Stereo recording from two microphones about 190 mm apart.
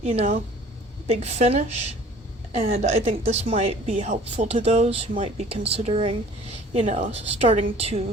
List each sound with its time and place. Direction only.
0.0 s a woman's voice: 35° right (ahead or behind)